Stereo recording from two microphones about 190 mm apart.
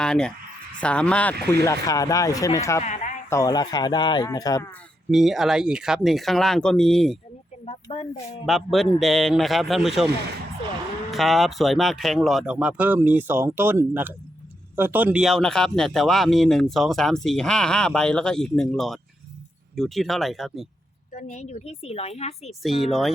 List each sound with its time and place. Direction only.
0.0 s speech: 5° left (ahead or behind)
1.6 s speech: 20° left (ahead or behind)
2.8 s a sound: 40° left (ahead or behind)
3.2 s speech: 15° left (ahead or behind)
5.1 s speech: centre (ahead or behind)
7.6 s speech: 35° left (ahead or behind)
8.4 s speech: centre (ahead or behind)
11.1 s speech: centre (ahead or behind)
21.1 s a woman's voice: 40° left (ahead or behind)
22.6 s speech: centre (ahead or behind)